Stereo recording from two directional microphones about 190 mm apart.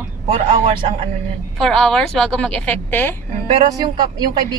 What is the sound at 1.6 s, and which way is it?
A woman's voice, centre (ahead or behind).